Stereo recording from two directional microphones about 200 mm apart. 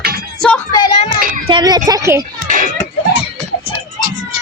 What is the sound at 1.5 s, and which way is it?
Speech, 20° right (ahead or behind).